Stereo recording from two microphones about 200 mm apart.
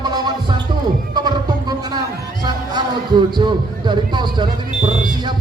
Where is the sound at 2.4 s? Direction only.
20° right (ahead or behind).